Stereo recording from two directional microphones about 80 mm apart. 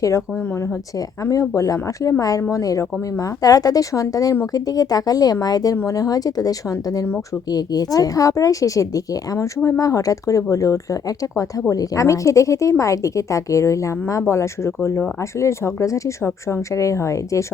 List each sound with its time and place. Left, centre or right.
0.0 s speech: left